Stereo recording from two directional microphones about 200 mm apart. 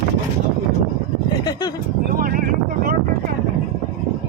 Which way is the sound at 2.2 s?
45° right (ahead or behind).